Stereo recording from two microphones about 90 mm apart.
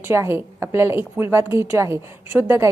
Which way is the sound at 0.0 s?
30° right (ahead or behind).